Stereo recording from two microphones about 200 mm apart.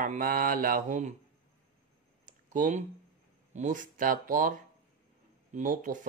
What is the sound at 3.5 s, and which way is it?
Speech, 40° right (ahead or behind).